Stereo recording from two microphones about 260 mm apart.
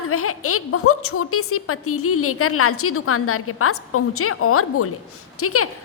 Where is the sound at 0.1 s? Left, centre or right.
Left.